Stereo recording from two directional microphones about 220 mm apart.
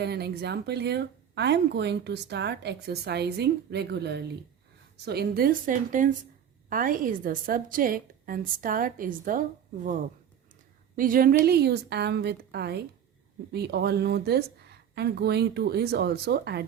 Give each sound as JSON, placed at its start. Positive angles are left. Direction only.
{"t": 0.0, "sound": "a woman's voice", "side_deg": -50}
{"t": 10.9, "sound": "speech", "side_deg": -40}